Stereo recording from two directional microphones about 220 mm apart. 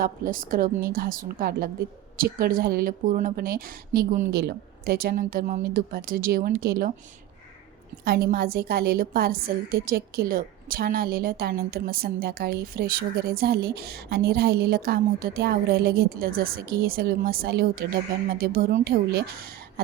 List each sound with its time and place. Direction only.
0.0 s speech: 40° right (ahead or behind)
8.0 s a woman's voice: 45° right (ahead or behind)